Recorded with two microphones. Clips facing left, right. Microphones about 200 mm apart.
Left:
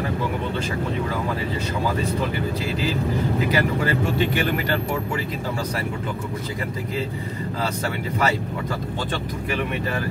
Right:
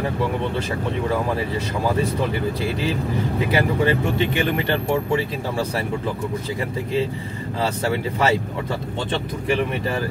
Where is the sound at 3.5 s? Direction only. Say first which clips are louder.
Right 2 dB; 25° right (ahead or behind).